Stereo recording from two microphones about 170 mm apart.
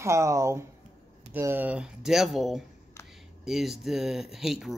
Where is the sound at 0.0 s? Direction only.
15° right (ahead or behind).